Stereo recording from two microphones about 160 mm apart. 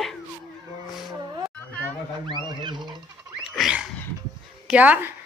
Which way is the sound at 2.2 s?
30° right (ahead or behind).